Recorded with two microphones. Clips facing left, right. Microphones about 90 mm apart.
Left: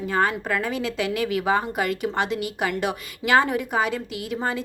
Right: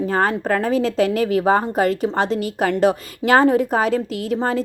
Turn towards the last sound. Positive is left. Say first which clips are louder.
# right 6 dB
turn(degrees=-40)  # may be behind; listen again after turning